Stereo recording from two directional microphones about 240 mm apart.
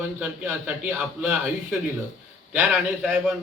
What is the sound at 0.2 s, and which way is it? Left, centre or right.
Speech, centre.